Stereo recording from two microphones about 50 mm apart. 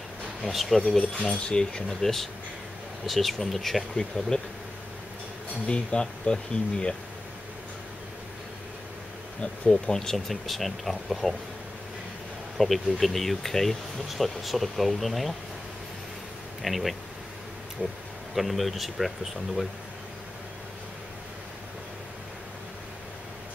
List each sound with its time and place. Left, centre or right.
0.4 s speech: centre
1.3 s speech: centre
1.9 s speech: centre
5.7 s speech: centre
9.4 s speech: centre
12.5 s speech: centre
16.6 s speech: centre
18.3 s speech: centre